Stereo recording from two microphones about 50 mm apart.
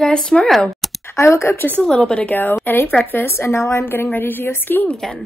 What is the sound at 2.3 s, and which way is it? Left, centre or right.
A woman's voice, left.